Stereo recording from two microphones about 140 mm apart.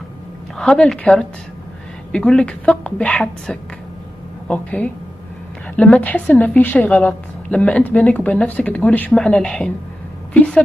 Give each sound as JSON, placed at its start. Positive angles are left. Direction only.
{"t": 0.6, "sound": "a woman's voice", "side_deg": 5}